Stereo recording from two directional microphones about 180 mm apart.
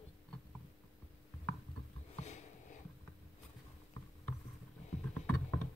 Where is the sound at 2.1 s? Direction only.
40° left (ahead or behind).